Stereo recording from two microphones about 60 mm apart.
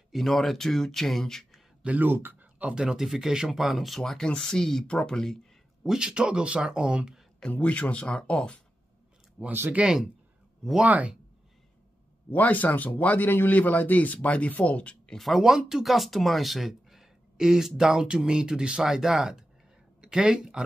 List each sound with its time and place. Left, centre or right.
0.1 s speech: centre
1.8 s speech: right
2.6 s speech: centre
4.0 s speech: centre
5.9 s speech: centre
7.5 s a man's voice: left
9.5 s speech: right
9.8 s speech: centre
10.8 s speech: right
12.3 s a man's voice: left
15.1 s speech: centre